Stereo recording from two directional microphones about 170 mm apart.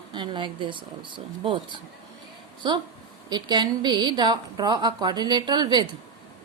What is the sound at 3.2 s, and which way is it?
A woman's voice, 25° right (ahead or behind).